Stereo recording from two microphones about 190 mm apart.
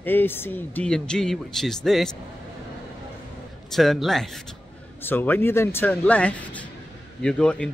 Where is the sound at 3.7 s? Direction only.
Centre (ahead or behind).